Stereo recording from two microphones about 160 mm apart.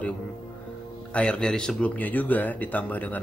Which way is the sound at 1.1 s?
5° left (ahead or behind).